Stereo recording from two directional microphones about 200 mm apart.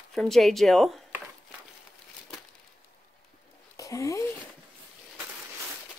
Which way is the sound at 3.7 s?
15° left (ahead or behind).